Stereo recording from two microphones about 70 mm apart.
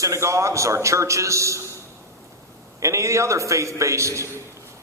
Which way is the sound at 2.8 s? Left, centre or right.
Right.